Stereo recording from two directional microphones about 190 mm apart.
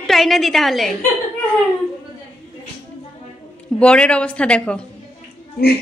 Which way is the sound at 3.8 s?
5° left (ahead or behind).